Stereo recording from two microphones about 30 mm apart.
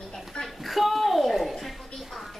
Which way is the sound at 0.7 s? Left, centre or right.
Centre.